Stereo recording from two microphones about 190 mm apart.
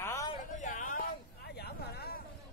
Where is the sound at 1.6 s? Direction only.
55° left (ahead or behind).